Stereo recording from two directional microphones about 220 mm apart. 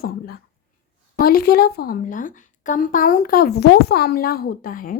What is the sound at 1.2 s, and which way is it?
A woman's voice, 45° left (ahead or behind).